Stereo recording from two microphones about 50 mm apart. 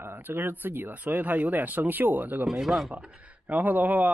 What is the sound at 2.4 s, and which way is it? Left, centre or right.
Speech, centre.